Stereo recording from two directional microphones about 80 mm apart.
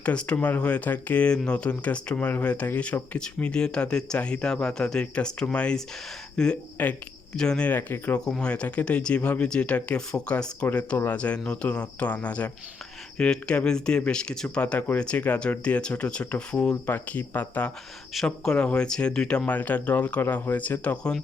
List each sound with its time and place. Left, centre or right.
0.0 s speech: centre
6.8 s speech: left
7.3 s speech: centre
7.7 s speech: left
8.2 s speech: centre